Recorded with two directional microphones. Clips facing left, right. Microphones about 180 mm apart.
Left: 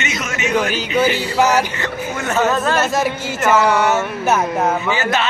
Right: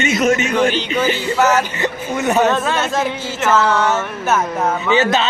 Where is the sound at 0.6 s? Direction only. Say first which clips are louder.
Right 1 dB; 10° left (ahead or behind).